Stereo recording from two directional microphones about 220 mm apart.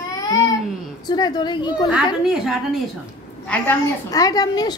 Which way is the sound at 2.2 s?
5° right (ahead or behind).